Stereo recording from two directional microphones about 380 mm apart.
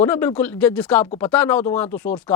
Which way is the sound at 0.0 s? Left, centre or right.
Centre.